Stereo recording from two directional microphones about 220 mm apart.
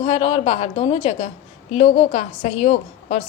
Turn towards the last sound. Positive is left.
turn(degrees=30)  # may be behind; listen again after turning